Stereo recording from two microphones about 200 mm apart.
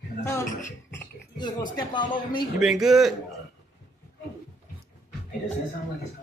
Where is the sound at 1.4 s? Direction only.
20° left (ahead or behind).